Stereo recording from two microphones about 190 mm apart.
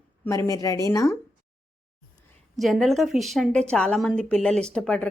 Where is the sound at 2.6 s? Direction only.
Centre (ahead or behind).